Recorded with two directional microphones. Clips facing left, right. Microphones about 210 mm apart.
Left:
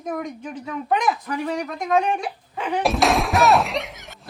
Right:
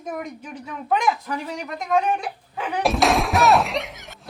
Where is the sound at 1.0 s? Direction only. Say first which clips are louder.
Right 3 dB; centre (ahead or behind).